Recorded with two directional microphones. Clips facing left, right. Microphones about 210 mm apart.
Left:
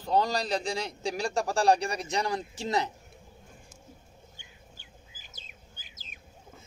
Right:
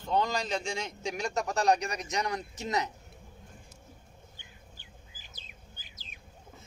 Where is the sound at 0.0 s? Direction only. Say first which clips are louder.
Left 3 dB; 35° left (ahead or behind).